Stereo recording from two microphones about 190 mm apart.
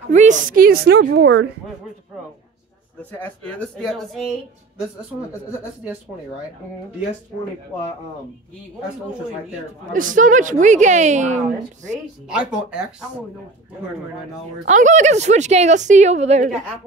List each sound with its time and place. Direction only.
0.1 s a woman's voice: 40° right (ahead or behind); by 1.5 s 65° right (ahead or behind)
3.0 s speech: 10° left (ahead or behind)
9.9 s a woman's voice: 45° right (ahead or behind)
12.3 s speech: 5° right (ahead or behind)
14.6 s a woman's voice: 40° right (ahead or behind)